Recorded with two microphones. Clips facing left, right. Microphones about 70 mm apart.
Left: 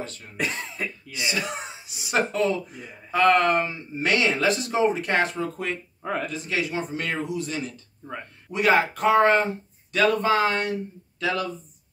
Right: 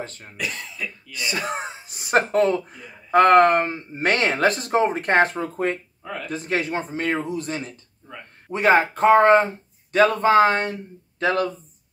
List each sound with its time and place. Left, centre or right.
0.0 s speech: right
0.4 s speech: left
1.1 s speech: right